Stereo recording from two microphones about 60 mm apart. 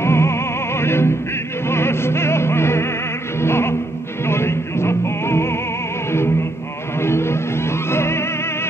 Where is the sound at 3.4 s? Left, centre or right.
Left.